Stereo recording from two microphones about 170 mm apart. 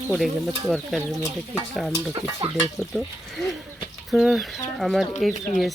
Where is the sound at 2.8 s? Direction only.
Centre (ahead or behind).